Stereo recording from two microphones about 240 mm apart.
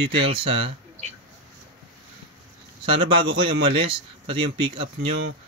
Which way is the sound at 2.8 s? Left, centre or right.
Right.